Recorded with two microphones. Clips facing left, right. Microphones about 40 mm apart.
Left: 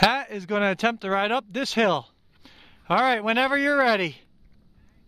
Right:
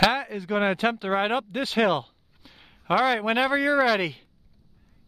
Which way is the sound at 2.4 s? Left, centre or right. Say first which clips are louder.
Left 1 dB; centre.